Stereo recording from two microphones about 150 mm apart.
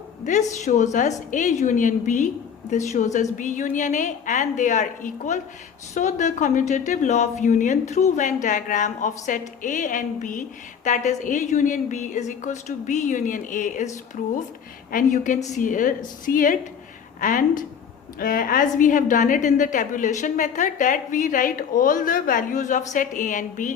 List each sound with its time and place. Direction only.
0.3 s a woman's voice: 50° left (ahead or behind)